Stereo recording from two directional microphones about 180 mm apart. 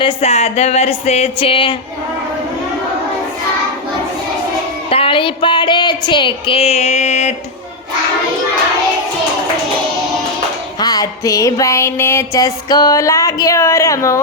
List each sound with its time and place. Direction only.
0.0 s speech: 35° left (ahead or behind)
4.9 s speech: 30° left (ahead or behind)
10.8 s music: 20° left (ahead or behind)